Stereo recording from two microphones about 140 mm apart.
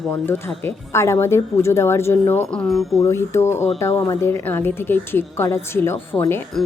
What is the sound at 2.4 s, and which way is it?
Speech, 5° left (ahead or behind).